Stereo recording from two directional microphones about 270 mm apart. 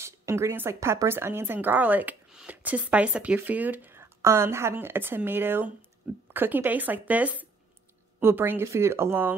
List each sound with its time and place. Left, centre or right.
0.0 s speech: centre